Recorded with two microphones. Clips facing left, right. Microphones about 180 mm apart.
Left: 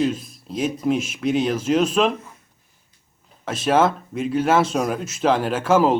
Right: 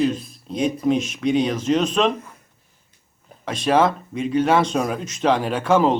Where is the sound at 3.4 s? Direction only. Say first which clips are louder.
Even; 5° left (ahead or behind).